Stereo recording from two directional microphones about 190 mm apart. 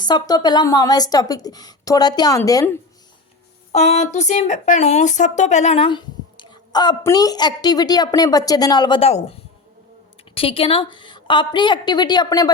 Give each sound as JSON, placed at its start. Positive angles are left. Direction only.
{"t": 0.0, "sound": "speech", "side_deg": 20}
{"t": 3.7, "sound": "speech", "side_deg": 35}
{"t": 10.3, "sound": "speech", "side_deg": 30}